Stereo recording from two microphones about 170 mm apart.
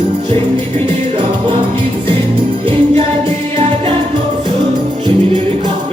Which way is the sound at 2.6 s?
30° right (ahead or behind).